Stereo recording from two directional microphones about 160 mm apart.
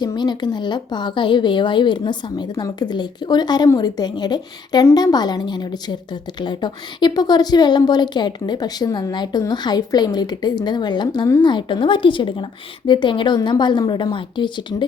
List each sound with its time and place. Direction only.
0.0 s a woman's voice: 25° left (ahead or behind)